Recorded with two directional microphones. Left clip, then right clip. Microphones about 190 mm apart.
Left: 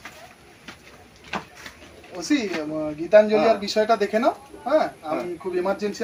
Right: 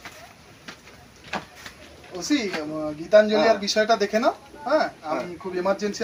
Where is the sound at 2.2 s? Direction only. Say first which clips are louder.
Left 1 dB; 20° right (ahead or behind).